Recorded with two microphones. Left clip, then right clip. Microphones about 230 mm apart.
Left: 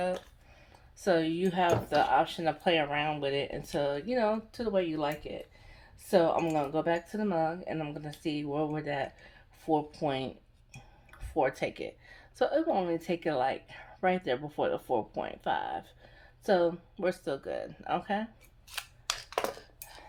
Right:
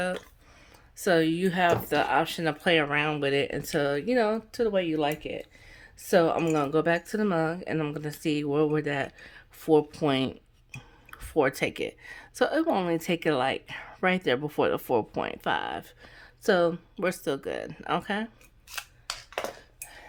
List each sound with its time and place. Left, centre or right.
1.0 s speech: right